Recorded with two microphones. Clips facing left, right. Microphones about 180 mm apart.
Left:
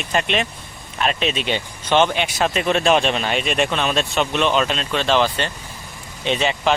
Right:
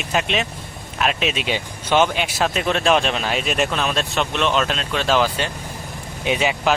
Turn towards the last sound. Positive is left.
turn(degrees=-5)  # may be behind; listen again after turning